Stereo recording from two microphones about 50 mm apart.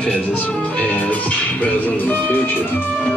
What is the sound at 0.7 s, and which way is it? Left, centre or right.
Music, left.